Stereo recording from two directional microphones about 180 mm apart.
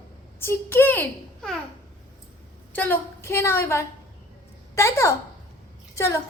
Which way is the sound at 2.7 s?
10° left (ahead or behind).